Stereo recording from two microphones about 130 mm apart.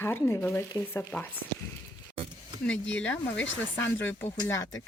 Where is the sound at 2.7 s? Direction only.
10° left (ahead or behind).